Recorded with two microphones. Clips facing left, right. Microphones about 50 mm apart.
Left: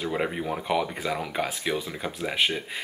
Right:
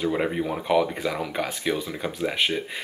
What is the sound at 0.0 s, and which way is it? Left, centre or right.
Speech, centre.